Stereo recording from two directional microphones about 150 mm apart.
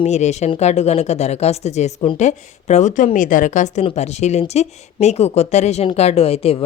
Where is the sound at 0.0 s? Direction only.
50° left (ahead or behind).